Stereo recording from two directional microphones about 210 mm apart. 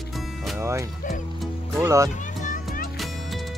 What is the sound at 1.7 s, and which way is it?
Speech, 15° right (ahead or behind).